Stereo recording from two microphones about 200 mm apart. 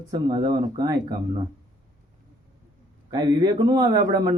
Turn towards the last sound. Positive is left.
turn(degrees=-20)  # may be behind; listen again after turning